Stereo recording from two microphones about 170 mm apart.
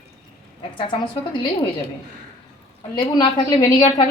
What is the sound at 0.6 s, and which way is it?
Speech, 30° left (ahead or behind).